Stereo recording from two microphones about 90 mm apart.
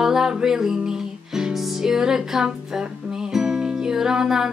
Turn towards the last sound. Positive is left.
turn(degrees=-5)  # may be behind; listen again after turning